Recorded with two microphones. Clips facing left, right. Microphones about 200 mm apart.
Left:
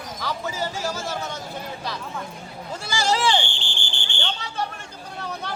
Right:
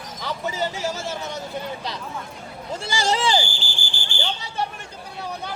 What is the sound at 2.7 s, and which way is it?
Speech, 25° right (ahead or behind).